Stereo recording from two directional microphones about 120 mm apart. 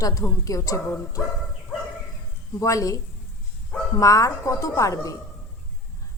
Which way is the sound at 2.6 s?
25° left (ahead or behind).